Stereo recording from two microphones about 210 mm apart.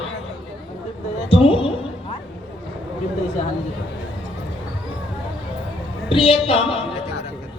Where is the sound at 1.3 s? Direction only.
25° left (ahead or behind).